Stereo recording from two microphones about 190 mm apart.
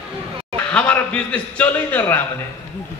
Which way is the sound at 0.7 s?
5° left (ahead or behind).